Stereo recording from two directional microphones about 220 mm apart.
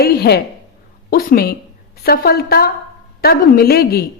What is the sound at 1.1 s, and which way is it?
A woman's voice, 45° left (ahead or behind).